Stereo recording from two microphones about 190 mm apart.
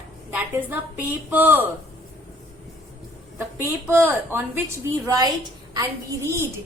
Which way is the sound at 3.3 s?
15° right (ahead or behind).